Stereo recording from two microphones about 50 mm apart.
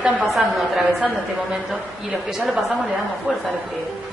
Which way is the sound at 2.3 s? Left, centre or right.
Centre.